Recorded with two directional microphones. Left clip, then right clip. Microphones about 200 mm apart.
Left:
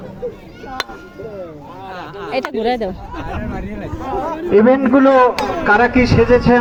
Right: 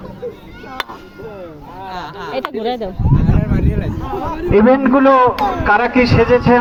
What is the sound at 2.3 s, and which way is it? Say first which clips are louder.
Speech: left 3 dB; 20° left (ahead or behind).